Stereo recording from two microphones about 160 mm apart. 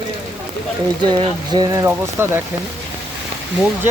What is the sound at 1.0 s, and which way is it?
Speech, 30° right (ahead or behind).